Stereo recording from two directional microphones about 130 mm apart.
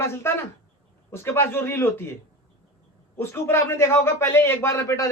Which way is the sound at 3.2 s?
20° left (ahead or behind).